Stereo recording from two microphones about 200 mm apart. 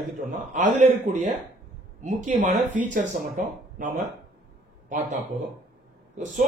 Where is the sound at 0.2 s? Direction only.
40° right (ahead or behind).